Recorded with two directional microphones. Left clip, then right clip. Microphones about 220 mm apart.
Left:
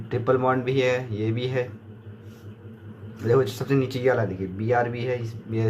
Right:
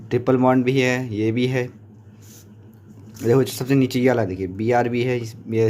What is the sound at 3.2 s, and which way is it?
Speech, 45° right (ahead or behind).